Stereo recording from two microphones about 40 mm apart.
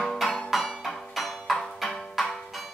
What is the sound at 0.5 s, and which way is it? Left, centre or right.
Music, centre.